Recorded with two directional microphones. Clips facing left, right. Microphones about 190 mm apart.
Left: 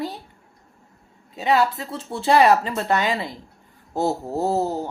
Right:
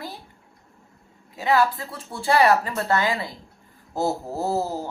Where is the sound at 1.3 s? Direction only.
20° left (ahead or behind).